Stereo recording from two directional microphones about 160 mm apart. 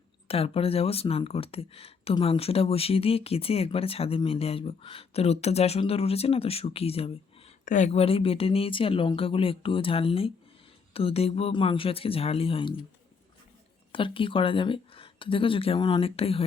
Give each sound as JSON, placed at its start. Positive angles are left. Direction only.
{"t": 0.3, "sound": "speech", "side_deg": 35}
{"t": 7.6, "sound": "speech", "side_deg": 50}
{"t": 13.9, "sound": "speech", "side_deg": 35}